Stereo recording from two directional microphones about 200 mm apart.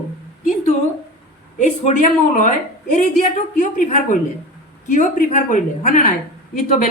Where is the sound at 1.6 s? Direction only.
40° left (ahead or behind).